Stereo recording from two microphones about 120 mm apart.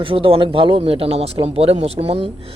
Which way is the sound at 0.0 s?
45° right (ahead or behind).